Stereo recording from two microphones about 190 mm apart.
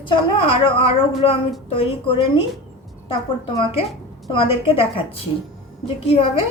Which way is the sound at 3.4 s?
30° left (ahead or behind).